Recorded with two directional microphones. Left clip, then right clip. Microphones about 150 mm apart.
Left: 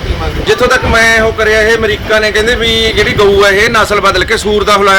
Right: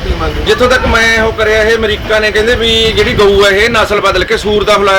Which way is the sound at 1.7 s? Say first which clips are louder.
Left 1 dB; 10° left (ahead or behind).